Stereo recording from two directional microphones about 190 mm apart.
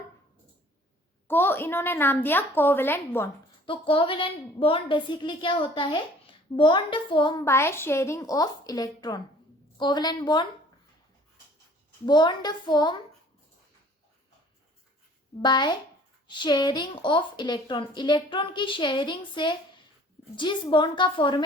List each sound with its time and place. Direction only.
1.3 s a woman's voice: 10° left (ahead or behind)
3.7 s a woman's voice: 25° left (ahead or behind)
12.0 s a woman's voice: 25° left (ahead or behind)
15.4 s a woman's voice: 25° left (ahead or behind)